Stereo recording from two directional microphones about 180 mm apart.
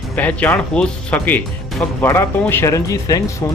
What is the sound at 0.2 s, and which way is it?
Speech, 10° left (ahead or behind).